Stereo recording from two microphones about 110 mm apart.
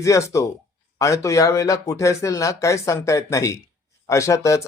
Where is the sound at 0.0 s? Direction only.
30° left (ahead or behind).